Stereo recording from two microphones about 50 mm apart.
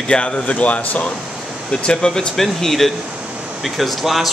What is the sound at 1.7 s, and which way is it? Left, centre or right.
Speech, centre.